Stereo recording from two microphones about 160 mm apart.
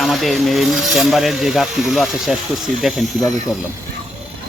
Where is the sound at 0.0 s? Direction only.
Centre (ahead or behind).